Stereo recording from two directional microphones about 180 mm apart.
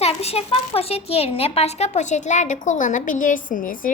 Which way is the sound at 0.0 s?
35° left (ahead or behind).